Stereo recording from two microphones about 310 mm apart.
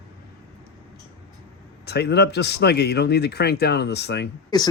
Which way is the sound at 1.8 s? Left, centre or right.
Left.